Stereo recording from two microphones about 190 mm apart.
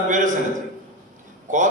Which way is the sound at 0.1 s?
40° right (ahead or behind).